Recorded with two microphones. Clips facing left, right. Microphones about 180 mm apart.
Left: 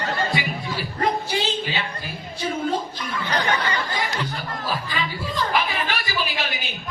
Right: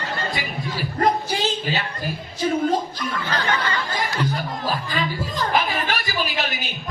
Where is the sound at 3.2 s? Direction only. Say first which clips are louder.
Left 2 dB; 15° left (ahead or behind).